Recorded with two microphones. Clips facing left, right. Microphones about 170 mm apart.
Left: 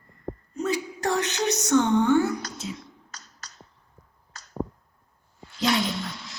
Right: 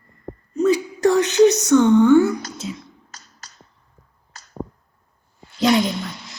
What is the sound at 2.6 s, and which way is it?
Speech, 90° right.